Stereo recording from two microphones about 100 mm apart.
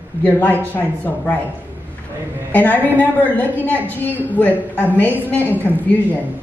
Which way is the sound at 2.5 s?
20° left (ahead or behind).